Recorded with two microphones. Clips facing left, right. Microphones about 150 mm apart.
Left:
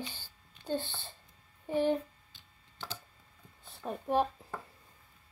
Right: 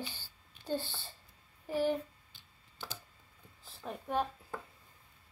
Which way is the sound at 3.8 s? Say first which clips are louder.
Left 5 dB; 25° left (ahead or behind).